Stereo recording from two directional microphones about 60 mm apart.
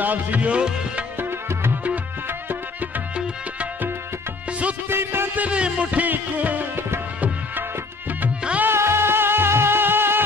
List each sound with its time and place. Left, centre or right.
0.0 s music: right
4.8 s music: right
5.4 s music: centre
8.6 s music: right